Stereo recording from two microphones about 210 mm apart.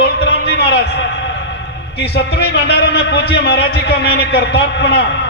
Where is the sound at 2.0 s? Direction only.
50° left (ahead or behind).